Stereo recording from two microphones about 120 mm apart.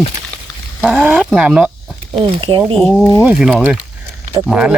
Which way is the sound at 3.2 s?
10° right (ahead or behind).